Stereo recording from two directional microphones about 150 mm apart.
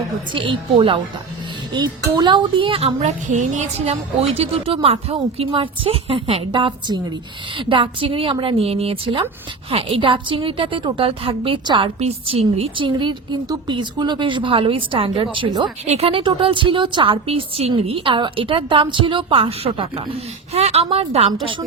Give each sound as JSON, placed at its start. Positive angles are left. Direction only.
{"t": 0.3, "sound": "a woman's voice", "side_deg": -35}